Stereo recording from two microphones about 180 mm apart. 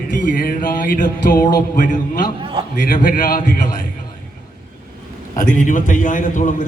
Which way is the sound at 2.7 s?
50° left (ahead or behind).